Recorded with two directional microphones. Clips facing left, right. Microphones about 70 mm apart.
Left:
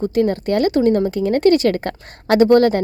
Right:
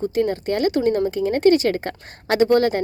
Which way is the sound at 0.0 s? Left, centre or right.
Left.